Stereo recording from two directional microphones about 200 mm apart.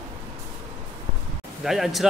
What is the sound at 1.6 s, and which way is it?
Speech, centre (ahead or behind).